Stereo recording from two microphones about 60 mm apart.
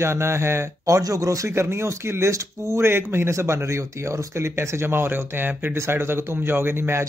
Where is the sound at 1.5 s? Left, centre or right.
Right.